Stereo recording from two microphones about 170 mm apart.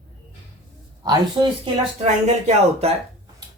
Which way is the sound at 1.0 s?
30° right (ahead or behind).